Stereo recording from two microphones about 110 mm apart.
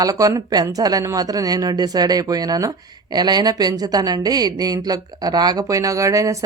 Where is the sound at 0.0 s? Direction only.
35° right (ahead or behind).